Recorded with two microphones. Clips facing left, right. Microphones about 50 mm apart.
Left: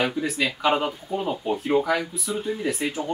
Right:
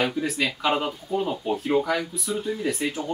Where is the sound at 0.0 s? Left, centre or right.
Centre.